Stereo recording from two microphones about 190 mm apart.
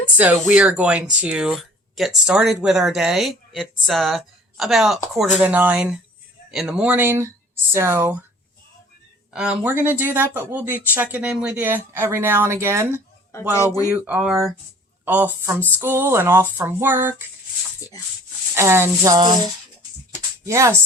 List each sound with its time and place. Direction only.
0.2 s speech: 10° right (ahead or behind)
9.3 s speech: 5° right (ahead or behind)
18.5 s speech: 15° right (ahead or behind)
20.5 s speech: 15° right (ahead or behind)